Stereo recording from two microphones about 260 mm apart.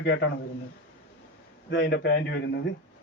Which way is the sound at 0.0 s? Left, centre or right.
Left.